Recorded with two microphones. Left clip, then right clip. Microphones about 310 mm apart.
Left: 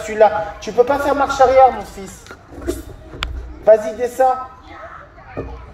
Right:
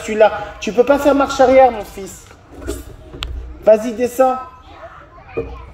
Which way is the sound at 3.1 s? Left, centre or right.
Right.